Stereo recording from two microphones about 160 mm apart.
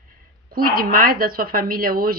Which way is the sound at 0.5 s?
65° right (ahead or behind).